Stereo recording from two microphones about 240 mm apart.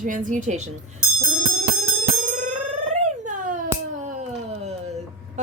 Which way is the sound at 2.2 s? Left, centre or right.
Right.